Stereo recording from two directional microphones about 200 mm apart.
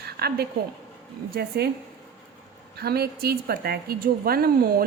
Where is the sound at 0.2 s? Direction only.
50° right (ahead or behind).